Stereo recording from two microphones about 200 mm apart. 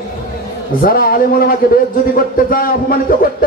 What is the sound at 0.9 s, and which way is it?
Speech, 45° left (ahead or behind).